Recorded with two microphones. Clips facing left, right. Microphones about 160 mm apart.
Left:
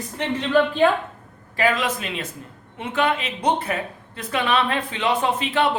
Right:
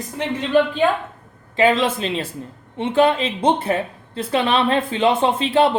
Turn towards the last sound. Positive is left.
turn(degrees=-30)  # may be behind; listen again after turning